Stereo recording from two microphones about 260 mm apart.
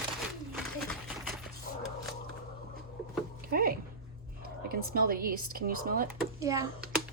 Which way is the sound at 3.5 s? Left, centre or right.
Right.